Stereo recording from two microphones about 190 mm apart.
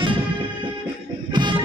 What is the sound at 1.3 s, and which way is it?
Music, 25° right (ahead or behind).